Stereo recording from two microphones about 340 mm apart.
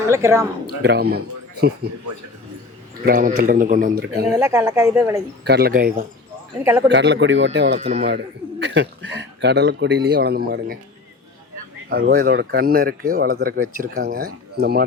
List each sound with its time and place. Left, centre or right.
0.1 s speech: centre
0.8 s speech: right
3.1 s speech: right
4.4 s speech: centre
5.5 s speech: right
6.6 s speech: centre
6.8 s speech: right
7.8 s speech: centre
8.0 s speech: right
11.9 s speech: right